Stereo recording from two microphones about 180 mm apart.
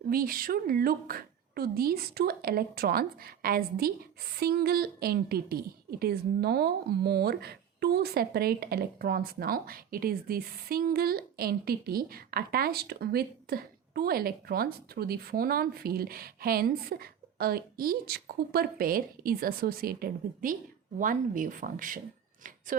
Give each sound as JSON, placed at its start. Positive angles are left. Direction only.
{"t": 0.1, "sound": "a woman's voice", "side_deg": -55}